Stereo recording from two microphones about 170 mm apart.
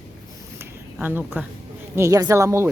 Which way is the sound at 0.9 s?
10° right (ahead or behind).